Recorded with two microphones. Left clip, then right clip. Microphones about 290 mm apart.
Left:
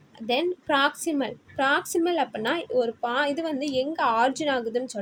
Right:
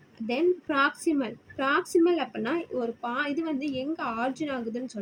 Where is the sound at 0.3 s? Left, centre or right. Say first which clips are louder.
Left 2 dB; left.